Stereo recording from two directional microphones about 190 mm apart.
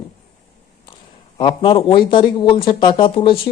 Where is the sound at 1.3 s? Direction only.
25° left (ahead or behind).